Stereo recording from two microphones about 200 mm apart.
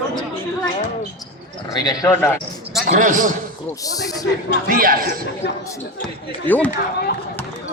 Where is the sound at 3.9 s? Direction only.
20° left (ahead or behind).